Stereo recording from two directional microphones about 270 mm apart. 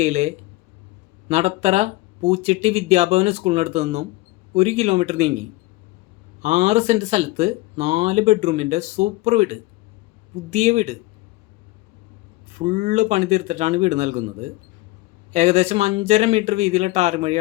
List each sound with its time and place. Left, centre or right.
0.0 s speech: right
6.4 s speech: right
12.5 s speech: right
15.3 s speech: right